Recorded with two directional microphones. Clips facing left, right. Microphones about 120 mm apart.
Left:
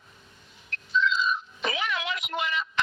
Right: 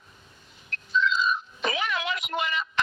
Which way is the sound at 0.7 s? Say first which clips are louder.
Even; 45° right (ahead or behind).